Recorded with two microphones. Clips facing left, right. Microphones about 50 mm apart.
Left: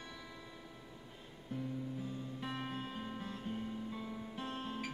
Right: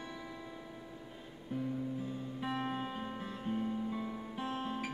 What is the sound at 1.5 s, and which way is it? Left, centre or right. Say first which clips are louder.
Music: right 4 dB; centre.